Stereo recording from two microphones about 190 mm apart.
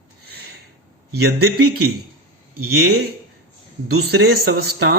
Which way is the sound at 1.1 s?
60° right (ahead or behind).